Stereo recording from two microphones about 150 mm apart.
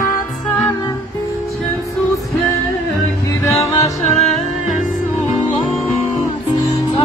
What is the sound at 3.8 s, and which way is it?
Music, 50° left (ahead or behind).